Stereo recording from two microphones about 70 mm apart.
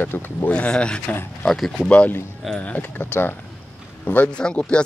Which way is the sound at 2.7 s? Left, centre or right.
Left.